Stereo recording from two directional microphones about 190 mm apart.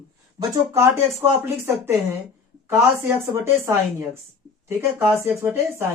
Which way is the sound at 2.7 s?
10° right (ahead or behind).